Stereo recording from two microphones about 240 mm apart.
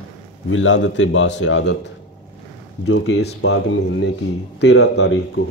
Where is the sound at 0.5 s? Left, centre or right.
Left.